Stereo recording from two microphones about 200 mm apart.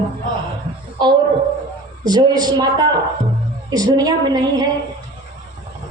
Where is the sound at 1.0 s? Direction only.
25° right (ahead or behind).